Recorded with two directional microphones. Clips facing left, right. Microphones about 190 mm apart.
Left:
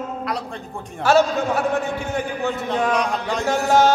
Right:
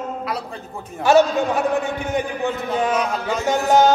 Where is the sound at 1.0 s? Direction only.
15° right (ahead or behind).